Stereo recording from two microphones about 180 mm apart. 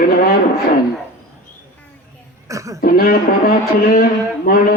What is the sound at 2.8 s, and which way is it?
Speech, 55° left (ahead or behind).